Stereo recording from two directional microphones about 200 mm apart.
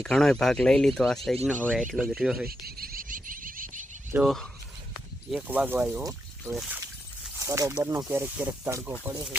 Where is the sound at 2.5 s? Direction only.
50° right (ahead or behind).